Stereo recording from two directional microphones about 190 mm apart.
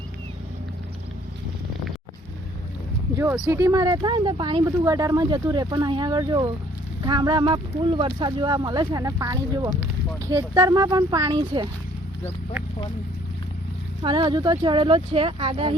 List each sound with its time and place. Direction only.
3.4 s speech: 15° right (ahead or behind)
14.0 s speech: 25° right (ahead or behind)